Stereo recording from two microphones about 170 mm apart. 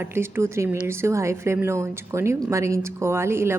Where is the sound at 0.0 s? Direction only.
15° right (ahead or behind).